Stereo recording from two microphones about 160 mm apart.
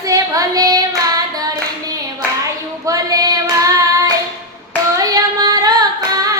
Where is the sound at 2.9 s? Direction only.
25° right (ahead or behind).